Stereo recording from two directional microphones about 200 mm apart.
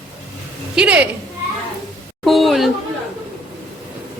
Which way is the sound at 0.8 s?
5° right (ahead or behind).